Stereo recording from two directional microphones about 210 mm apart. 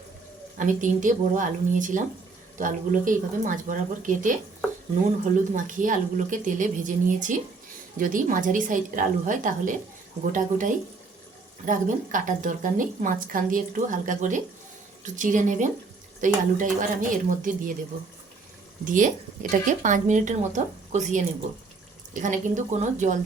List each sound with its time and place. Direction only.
0.5 s a woman's voice: 40° right (ahead or behind)
5.5 s a woman's voice: 40° right (ahead or behind)
18.9 s a woman's voice: 40° right (ahead or behind)